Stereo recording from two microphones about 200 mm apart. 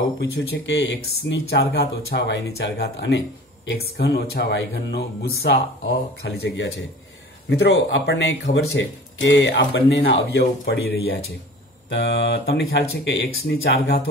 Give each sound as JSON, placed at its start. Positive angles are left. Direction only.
{"t": 0.2, "sound": "speech", "side_deg": 65}